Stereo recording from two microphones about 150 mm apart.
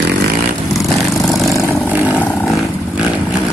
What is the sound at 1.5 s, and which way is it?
Vehicle, 15° left (ahead or behind).